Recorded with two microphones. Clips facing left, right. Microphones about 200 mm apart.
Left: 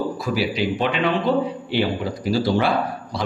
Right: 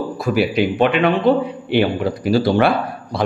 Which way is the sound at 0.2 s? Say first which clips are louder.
Right 10 dB; 55° right (ahead or behind).